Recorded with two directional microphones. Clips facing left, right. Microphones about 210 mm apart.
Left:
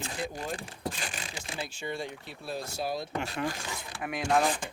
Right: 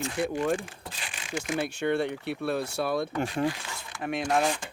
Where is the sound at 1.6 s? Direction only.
65° right (ahead or behind).